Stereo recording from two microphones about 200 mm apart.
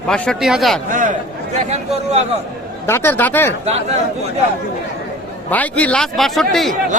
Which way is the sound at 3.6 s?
35° right (ahead or behind).